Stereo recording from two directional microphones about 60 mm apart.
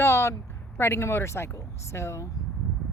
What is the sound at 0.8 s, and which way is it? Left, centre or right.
A woman's voice, left.